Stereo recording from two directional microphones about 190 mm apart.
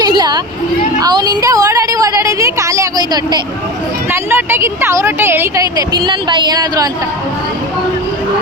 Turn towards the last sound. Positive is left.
turn(degrees=-20)  # may be behind; listen again after turning